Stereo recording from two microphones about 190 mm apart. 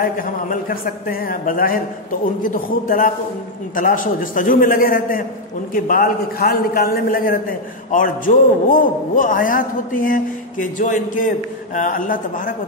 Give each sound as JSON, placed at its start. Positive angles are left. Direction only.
{"t": 0.5, "sound": "a man's voice", "side_deg": 50}